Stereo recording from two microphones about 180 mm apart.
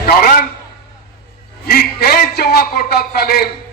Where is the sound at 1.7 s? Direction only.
60° left (ahead or behind).